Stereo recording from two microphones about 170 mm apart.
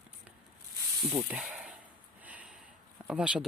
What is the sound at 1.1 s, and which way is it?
Speech, 5° right (ahead or behind).